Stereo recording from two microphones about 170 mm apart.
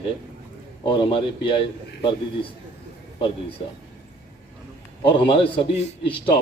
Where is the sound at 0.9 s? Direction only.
30° left (ahead or behind).